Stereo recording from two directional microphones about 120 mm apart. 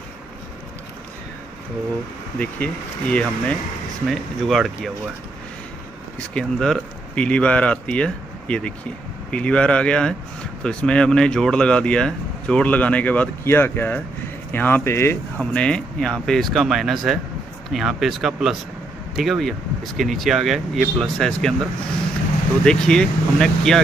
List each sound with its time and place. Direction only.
2.3 s speech: 10° left (ahead or behind)
6.1 s speech: 5° left (ahead or behind)
15.5 s speech: 10° left (ahead or behind)
22.7 s speech: 5° left (ahead or behind)